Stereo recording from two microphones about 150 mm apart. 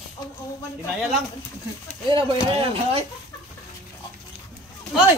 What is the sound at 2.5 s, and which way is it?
Speech, 40° right (ahead or behind).